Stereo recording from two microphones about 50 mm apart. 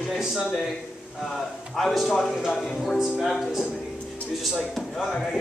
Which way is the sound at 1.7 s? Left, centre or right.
Centre.